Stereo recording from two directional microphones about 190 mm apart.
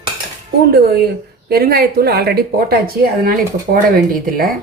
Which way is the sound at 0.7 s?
55° right (ahead or behind).